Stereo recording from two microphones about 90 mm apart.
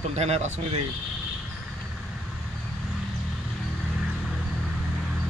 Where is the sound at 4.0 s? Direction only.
5° right (ahead or behind).